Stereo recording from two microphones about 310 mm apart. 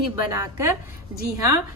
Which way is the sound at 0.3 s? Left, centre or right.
Centre.